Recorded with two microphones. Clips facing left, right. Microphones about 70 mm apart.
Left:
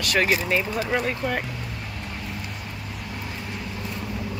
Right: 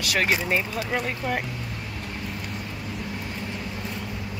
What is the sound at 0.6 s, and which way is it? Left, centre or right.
Speech, centre.